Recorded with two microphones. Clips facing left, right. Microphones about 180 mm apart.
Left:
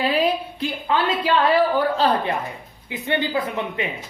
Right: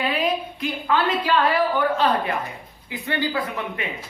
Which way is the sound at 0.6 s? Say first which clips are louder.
Left 1 dB; 30° left (ahead or behind).